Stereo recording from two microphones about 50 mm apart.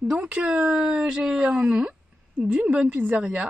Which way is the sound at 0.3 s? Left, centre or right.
Right.